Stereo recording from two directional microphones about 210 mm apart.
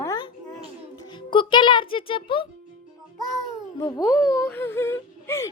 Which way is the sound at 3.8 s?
15° left (ahead or behind).